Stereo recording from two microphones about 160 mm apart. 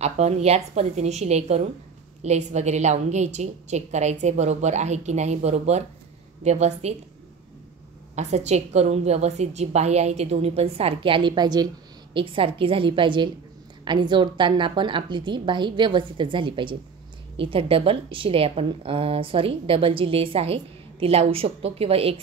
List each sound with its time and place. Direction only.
0.0 s a woman's voice: 40° right (ahead or behind)
8.2 s a woman's voice: 45° right (ahead or behind)